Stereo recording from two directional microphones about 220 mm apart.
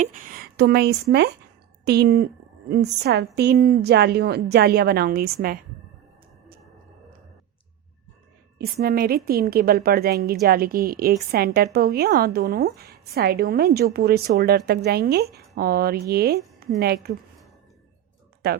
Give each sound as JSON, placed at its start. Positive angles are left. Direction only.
{"t": 0.0, "sound": "a woman's voice", "side_deg": -40}
{"t": 8.5, "sound": "a woman's voice", "side_deg": -45}
{"t": 18.4, "sound": "speech", "side_deg": -45}